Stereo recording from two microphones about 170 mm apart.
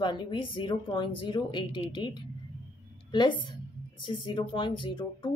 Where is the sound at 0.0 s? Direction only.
25° left (ahead or behind).